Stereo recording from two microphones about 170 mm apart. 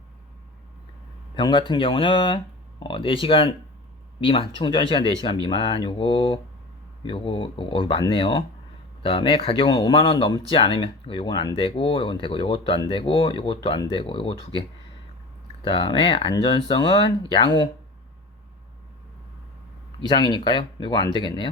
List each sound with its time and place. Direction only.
1.4 s speech: 30° left (ahead or behind)
15.6 s speech: 30° left (ahead or behind)
20.0 s speech: 25° left (ahead or behind)